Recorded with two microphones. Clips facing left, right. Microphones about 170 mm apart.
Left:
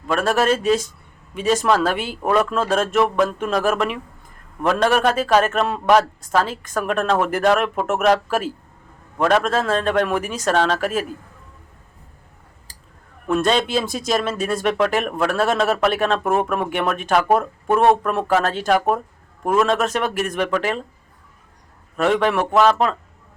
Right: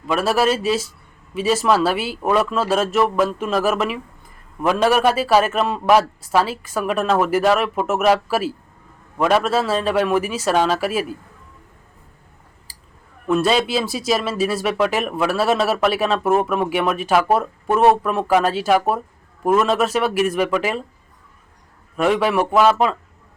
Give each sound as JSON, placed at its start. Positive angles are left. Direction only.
{"t": 0.1, "sound": "a man's voice", "side_deg": -5}
{"t": 13.2, "sound": "a man's voice", "side_deg": -5}
{"t": 21.9, "sound": "speech", "side_deg": -5}